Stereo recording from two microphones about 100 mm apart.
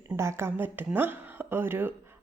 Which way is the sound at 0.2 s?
25° right (ahead or behind).